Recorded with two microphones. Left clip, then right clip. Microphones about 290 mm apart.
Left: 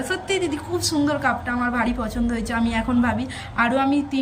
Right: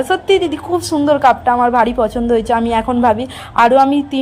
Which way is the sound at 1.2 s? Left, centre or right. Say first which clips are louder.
Right 12 dB; right.